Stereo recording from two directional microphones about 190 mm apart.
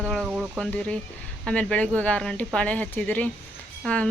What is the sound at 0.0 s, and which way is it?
Insect, centre (ahead or behind).